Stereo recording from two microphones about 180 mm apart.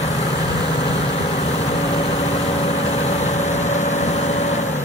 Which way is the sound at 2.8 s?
35° left (ahead or behind).